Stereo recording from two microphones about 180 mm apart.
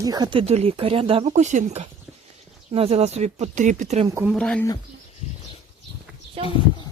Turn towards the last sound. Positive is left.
turn(degrees=-30)  # may be behind; listen again after turning